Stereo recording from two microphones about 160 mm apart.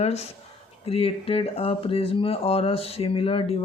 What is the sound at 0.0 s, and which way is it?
Speech, 40° left (ahead or behind).